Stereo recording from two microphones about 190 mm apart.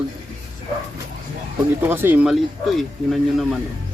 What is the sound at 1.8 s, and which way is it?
Speech, 10° right (ahead or behind).